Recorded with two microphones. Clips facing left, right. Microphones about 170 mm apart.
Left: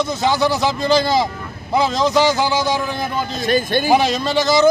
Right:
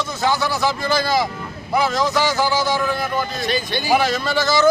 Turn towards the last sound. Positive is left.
turn(degrees=20)  # may be behind; listen again after turning